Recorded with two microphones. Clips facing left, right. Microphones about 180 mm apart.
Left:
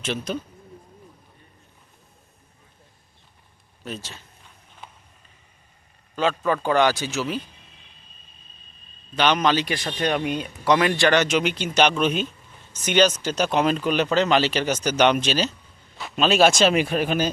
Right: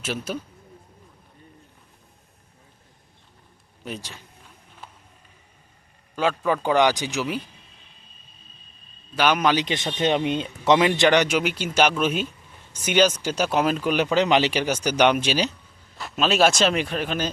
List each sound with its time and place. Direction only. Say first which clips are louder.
0.0 s speech: left 2 dB; 5° right (ahead or behind)
3.8 s speech: even; 15° right (ahead or behind)
4.8 s a sound: even; centre (ahead or behind)
6.1 s speech: even; 10° right (ahead or behind)
9.1 s speech: even; 10° right (ahead or behind)
16.0 s a man's voice: left 2 dB; centre (ahead or behind)